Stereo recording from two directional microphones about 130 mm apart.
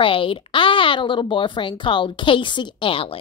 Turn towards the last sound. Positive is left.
turn(degrees=45)  # may be behind; listen again after turning